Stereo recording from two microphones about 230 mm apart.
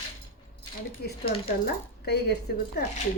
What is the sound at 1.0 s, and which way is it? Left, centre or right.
Speech, left.